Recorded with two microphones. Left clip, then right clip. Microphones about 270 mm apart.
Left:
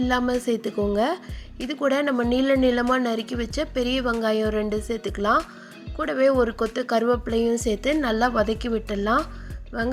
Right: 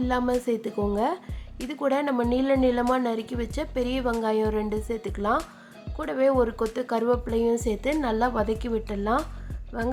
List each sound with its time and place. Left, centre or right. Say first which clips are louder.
0.1 s a woman's voice: even; centre